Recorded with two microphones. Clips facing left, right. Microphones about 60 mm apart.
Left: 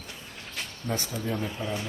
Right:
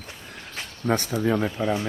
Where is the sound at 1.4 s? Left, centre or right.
Right.